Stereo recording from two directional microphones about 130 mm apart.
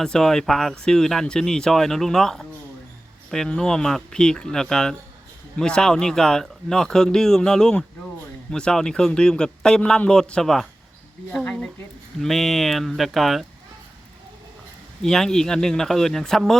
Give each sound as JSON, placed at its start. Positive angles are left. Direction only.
{"t": 0.0, "sound": "speech", "side_deg": 5}
{"t": 15.0, "sound": "speech", "side_deg": 5}